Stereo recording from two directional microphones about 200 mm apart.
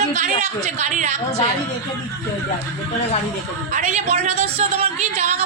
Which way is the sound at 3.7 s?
35° right (ahead or behind).